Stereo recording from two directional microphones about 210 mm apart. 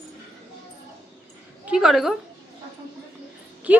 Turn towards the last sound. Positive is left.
turn(degrees=-5)  # may be behind; listen again after turning